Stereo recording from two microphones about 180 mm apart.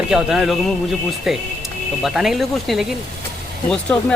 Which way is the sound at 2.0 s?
Centre (ahead or behind).